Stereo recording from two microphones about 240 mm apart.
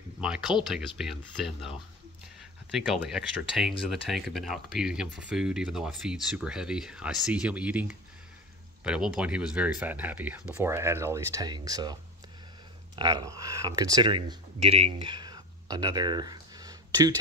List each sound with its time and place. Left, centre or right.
0.7 s speech: centre